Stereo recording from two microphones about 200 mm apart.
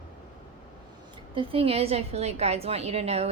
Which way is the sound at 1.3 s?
25° right (ahead or behind).